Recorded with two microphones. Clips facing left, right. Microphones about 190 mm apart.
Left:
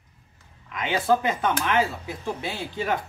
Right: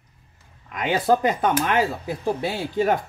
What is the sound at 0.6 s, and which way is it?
Speech, 40° right (ahead or behind).